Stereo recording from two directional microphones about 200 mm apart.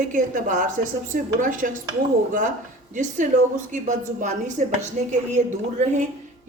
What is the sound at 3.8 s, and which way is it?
Speech, 40° right (ahead or behind).